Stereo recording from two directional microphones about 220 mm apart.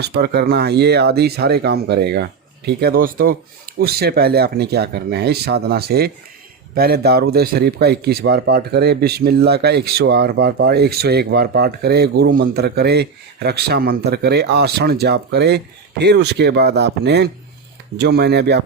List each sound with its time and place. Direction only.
0.0 s a man's voice: 50° right (ahead or behind)